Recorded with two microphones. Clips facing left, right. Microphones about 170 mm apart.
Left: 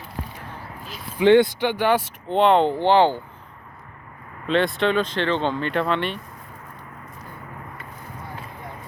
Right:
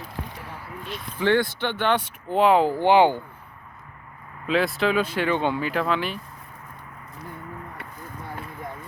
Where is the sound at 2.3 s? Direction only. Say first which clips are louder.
Left 1 dB; 5° right (ahead or behind).